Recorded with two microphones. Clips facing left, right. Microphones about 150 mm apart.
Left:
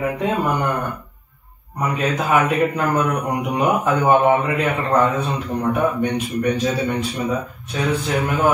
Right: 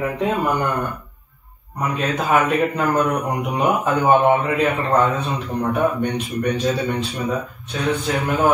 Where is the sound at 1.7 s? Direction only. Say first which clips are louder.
Left 1 dB; centre (ahead or behind).